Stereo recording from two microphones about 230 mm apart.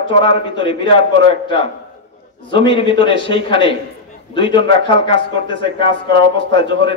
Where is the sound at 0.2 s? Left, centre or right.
Left.